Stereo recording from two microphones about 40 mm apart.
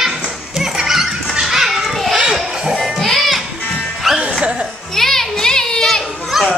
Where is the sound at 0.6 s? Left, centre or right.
Centre.